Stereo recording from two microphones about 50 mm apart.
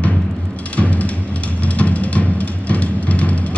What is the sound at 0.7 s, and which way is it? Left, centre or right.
Music, left.